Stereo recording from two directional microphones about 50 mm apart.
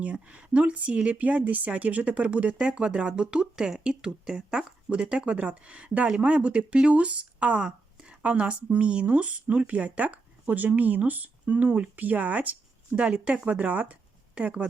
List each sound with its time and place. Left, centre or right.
0.0 s speech: right